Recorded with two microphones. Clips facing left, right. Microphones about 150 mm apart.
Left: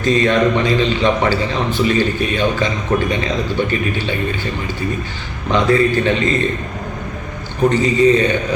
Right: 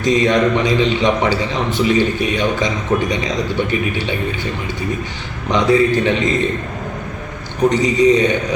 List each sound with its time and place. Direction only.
0.0 s a man's voice: 15° right (ahead or behind)
5.5 s a man's voice: 15° right (ahead or behind)
7.7 s a man's voice: 15° right (ahead or behind)